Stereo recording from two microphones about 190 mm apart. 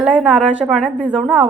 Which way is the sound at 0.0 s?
5° right (ahead or behind).